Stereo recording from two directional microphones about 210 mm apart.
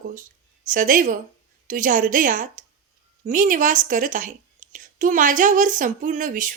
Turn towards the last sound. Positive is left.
turn(degrees=-40)  # may be behind; listen again after turning